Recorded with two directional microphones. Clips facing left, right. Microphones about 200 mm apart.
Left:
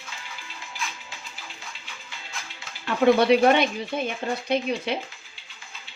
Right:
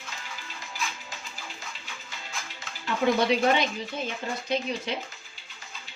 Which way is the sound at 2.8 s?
60° left (ahead or behind).